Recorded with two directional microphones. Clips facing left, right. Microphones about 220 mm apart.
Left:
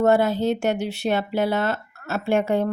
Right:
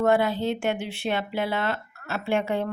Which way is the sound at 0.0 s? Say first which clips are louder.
Left 3 dB; 40° left (ahead or behind).